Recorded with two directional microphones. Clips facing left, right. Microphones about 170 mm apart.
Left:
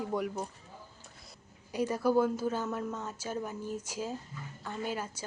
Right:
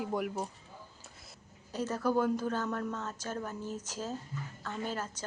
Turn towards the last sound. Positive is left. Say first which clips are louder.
# left 1 dB
turn(degrees=10)  # may be behind; listen again after turning